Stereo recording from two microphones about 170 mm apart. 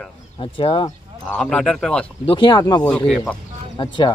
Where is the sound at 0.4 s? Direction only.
30° left (ahead or behind).